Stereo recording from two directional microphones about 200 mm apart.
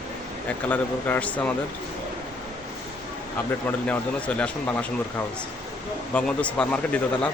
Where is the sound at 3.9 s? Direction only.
5° left (ahead or behind).